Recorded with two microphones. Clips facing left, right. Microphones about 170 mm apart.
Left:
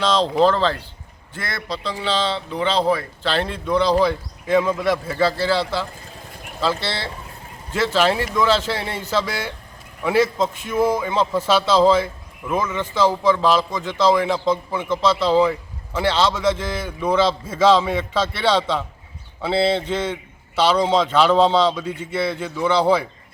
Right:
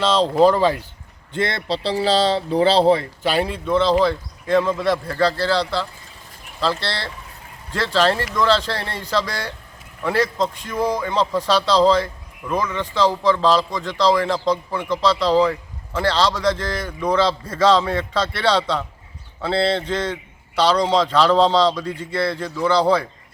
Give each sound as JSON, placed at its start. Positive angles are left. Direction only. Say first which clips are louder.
{"t": 0.0, "sound": "speech", "louder": "right 2 dB", "side_deg": -5}
{"t": 1.3, "sound": "speech", "louder": "right 6 dB", "side_deg": -25}
{"t": 3.2, "sound": "a man's voice", "louder": "right 2 dB", "side_deg": -10}